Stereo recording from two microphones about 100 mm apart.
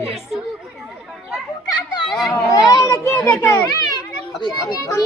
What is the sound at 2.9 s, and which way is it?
Speech, 20° left (ahead or behind).